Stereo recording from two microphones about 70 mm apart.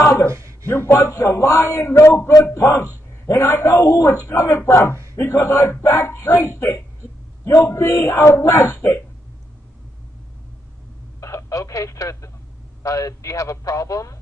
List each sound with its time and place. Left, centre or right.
0.0 s a sound: left
0.3 s speech: right
0.7 s a man's voice: left
0.9 s a man's voice: left
11.1 s telephone: left
12.8 s speech: left